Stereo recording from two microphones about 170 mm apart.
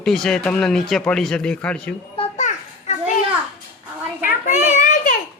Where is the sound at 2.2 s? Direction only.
45° left (ahead or behind).